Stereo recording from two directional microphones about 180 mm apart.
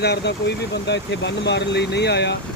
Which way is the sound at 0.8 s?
75° left (ahead or behind).